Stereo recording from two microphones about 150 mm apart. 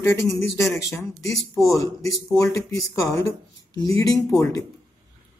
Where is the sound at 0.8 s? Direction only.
20° left (ahead or behind).